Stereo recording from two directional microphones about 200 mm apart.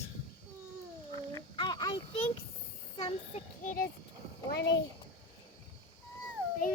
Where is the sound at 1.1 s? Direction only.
20° left (ahead or behind).